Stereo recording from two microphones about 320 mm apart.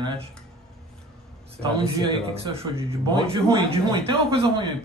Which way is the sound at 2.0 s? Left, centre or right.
Centre.